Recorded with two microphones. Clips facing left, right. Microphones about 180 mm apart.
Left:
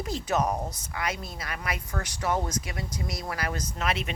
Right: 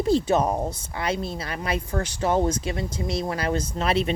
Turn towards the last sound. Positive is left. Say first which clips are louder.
# right 7 dB
turn(degrees=-30)  # may be behind; listen again after turning